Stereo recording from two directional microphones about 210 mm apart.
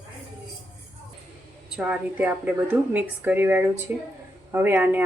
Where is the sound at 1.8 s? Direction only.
5° right (ahead or behind).